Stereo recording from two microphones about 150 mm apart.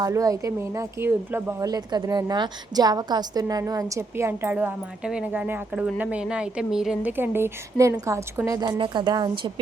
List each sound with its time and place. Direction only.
0.0 s speech: 20° right (ahead or behind)
8.8 s speech: 30° right (ahead or behind)